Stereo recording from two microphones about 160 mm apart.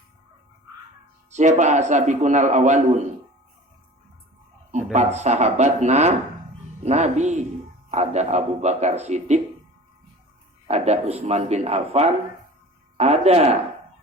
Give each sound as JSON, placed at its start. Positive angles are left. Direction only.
{"t": 1.3, "sound": "a man's voice", "side_deg": -45}
{"t": 4.7, "sound": "a man's voice", "side_deg": -45}
{"t": 10.7, "sound": "speech", "side_deg": -45}